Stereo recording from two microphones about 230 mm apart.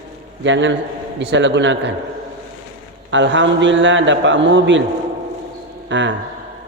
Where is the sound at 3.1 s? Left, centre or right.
Right.